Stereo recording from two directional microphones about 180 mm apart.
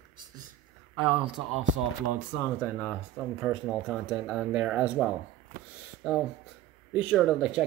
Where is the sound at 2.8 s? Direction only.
Centre (ahead or behind).